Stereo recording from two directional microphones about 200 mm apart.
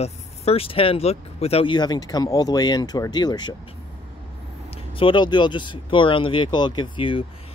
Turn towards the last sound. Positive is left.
turn(degrees=25)  # may be behind; listen again after turning